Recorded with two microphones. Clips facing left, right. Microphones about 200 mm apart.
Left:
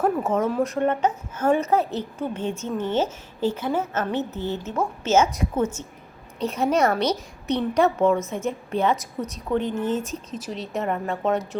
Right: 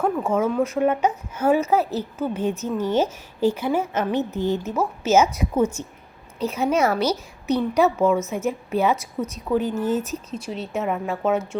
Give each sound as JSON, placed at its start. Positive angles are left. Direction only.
{"t": 0.0, "sound": "a woman's voice", "side_deg": 5}
{"t": 8.2, "sound": "a woman's voice", "side_deg": 30}
{"t": 8.4, "sound": "a woman's voice", "side_deg": -5}